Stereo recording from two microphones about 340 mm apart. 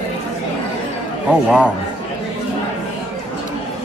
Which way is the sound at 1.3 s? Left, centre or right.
Centre.